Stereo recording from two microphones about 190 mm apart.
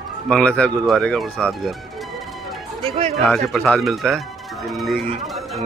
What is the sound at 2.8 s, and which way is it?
Speech, 35° right (ahead or behind).